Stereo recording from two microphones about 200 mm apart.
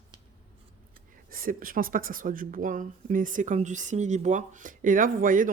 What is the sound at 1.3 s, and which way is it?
Speech, 45° right (ahead or behind).